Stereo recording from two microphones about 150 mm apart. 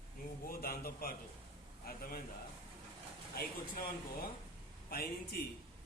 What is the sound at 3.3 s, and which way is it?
Speech, 80° left.